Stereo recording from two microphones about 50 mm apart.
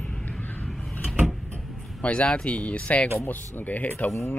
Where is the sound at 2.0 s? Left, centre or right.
Left.